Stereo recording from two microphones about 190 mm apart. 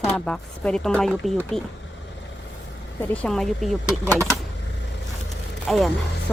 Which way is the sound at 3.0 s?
5° left (ahead or behind).